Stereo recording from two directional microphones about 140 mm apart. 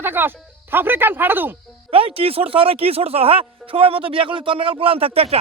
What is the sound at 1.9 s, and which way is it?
Speech, 45° right (ahead or behind).